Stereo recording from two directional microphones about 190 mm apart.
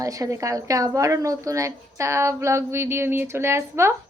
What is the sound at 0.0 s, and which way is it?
A woman's voice, 15° right (ahead or behind).